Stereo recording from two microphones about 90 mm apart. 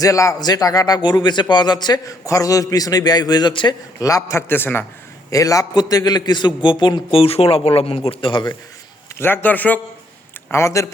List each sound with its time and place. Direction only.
0.0 s a man's voice: 40° left (ahead or behind); by 2.0 s 55° left (ahead or behind)
2.0 s a man's voice: 40° left (ahead or behind)
3.5 s a man's voice: 65° left (ahead or behind)
4.0 s a man's voice: 35° left (ahead or behind)
5.3 s a man's voice: 40° left (ahead or behind); by 8.5 s 60° left (ahead or behind)
9.1 s a man's voice: 25° left (ahead or behind)
10.5 s a man's voice: 35° left (ahead or behind)